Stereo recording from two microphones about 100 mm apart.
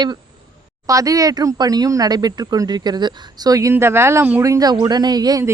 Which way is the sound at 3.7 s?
25° right (ahead or behind).